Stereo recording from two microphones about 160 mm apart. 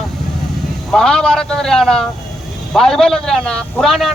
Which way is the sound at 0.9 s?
5° left (ahead or behind).